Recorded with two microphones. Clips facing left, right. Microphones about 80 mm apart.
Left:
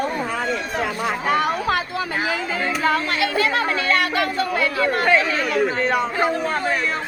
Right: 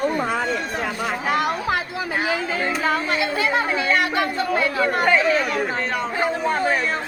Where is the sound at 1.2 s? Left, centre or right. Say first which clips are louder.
Left 2 dB; centre.